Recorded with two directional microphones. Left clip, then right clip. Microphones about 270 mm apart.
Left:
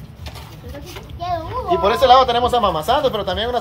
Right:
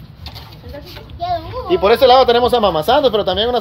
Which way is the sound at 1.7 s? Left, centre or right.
Right.